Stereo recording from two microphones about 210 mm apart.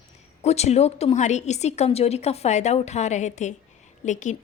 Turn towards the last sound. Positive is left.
turn(degrees=35)  # may be behind; listen again after turning